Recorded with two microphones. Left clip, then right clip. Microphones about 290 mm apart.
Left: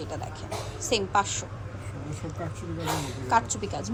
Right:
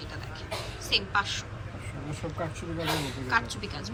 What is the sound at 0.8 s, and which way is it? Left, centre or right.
Speech, left.